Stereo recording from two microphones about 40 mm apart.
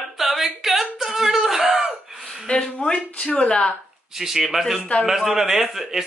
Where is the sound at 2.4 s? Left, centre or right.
Left.